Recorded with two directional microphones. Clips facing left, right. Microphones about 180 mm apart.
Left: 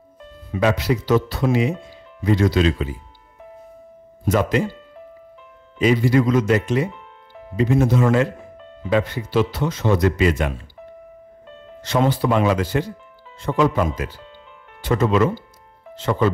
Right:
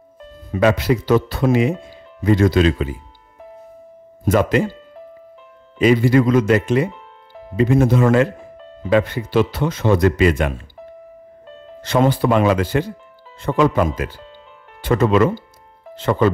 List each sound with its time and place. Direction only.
0.5 s speech: 55° right (ahead or behind)
4.2 s speech: 55° right (ahead or behind)
5.8 s speech: 60° right (ahead or behind)
6.9 s music: 35° right (ahead or behind)
7.5 s speech: 55° right (ahead or behind)
8.5 s music: 35° right (ahead or behind)
8.9 s speech: 60° right (ahead or behind)
11.4 s music: 35° right (ahead or behind)
11.8 s speech: 55° right (ahead or behind)